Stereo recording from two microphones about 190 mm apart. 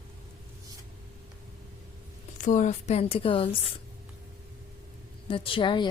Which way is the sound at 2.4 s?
40° left (ahead or behind).